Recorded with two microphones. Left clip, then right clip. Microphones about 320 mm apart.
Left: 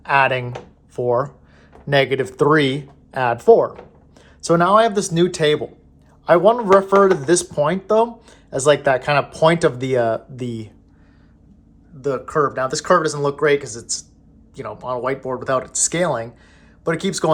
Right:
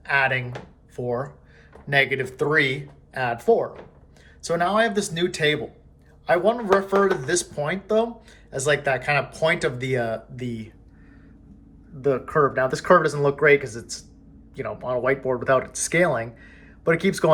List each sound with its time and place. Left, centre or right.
0.0 s speech: centre
12.0 s speech: centre